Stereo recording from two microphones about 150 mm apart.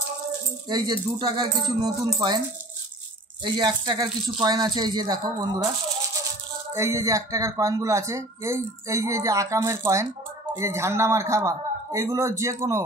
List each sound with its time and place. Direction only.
0.7 s speech: 30° right (ahead or behind)
3.4 s speech: 30° right (ahead or behind)
6.7 s speech: 20° right (ahead or behind)